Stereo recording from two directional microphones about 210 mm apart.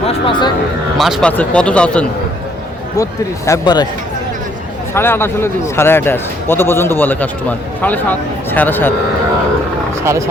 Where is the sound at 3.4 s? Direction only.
15° left (ahead or behind).